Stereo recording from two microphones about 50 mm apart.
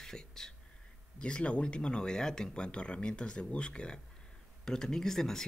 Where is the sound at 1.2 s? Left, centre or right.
Left.